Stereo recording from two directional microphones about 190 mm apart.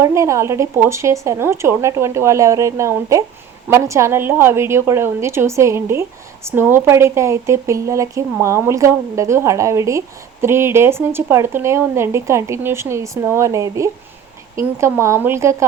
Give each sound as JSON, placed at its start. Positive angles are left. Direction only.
{"t": 0.0, "sound": "a woman's voice", "side_deg": -15}